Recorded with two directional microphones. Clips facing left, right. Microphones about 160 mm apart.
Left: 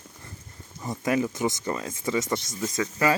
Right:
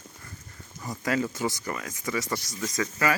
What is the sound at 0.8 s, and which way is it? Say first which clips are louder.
Speech: left 3 dB; 25° left (ahead or behind).